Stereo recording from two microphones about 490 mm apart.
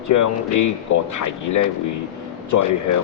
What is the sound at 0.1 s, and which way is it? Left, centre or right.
Speech, left.